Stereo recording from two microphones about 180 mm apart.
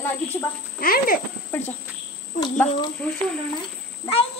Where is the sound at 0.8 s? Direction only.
55° left (ahead or behind).